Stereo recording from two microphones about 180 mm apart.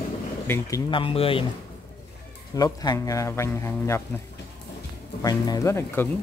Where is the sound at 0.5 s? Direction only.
20° left (ahead or behind).